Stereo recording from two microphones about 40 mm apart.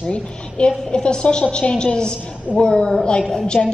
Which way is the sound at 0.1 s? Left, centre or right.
Left.